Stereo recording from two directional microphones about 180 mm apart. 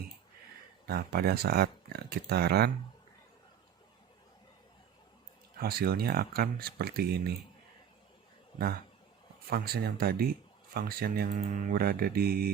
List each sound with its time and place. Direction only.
0.9 s speech: 60° right (ahead or behind)
5.5 s speech: 60° right (ahead or behind)
9.5 s speech: 60° right (ahead or behind)